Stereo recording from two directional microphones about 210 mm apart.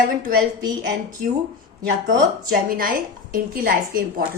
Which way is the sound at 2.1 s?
45° right (ahead or behind).